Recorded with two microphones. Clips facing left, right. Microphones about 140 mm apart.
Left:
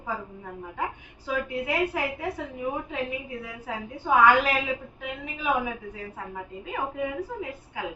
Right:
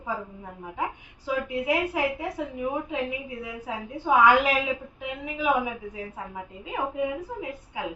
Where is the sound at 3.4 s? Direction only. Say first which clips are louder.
Right 1 dB; 15° right (ahead or behind).